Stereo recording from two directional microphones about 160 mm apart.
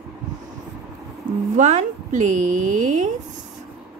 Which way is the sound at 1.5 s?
50° right (ahead or behind).